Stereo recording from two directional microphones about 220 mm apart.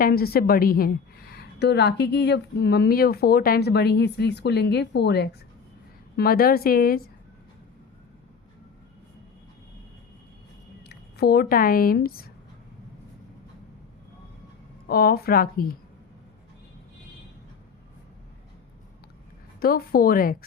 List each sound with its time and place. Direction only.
0.0 s a woman's voice: 45° left (ahead or behind)
10.8 s speech: 45° left (ahead or behind)
14.8 s a woman's voice: 45° left (ahead or behind)
19.5 s a woman's voice: 45° left (ahead or behind)